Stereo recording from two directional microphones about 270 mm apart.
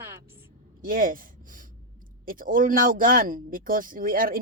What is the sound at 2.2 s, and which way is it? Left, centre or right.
Speech, right.